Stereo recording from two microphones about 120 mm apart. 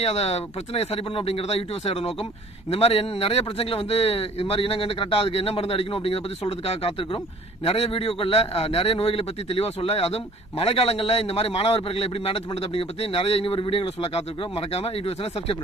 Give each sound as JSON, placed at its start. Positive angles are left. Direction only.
{"t": 0.0, "sound": "a man's voice", "side_deg": 60}